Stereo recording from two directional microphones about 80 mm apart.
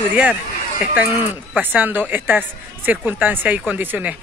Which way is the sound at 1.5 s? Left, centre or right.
Right.